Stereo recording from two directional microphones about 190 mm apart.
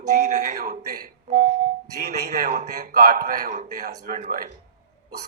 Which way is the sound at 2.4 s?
45° right (ahead or behind).